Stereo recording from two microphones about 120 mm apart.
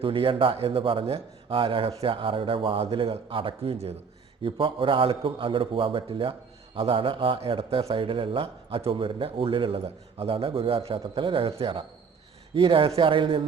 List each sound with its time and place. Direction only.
0.0 s a man's voice: 45° right (ahead or behind)